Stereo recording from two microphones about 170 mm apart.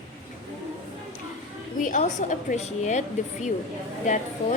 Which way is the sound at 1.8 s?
50° left (ahead or behind).